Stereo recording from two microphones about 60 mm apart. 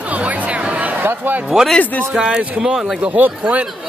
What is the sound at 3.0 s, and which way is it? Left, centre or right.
Speech, right.